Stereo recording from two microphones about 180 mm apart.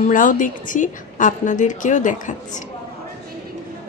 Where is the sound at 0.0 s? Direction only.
45° left (ahead or behind).